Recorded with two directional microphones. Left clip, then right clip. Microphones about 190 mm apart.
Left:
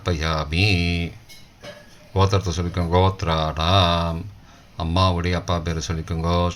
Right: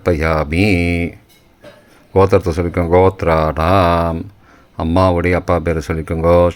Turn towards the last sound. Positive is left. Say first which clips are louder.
# right 12 dB
turn(degrees=-35)  # may be behind; listen again after turning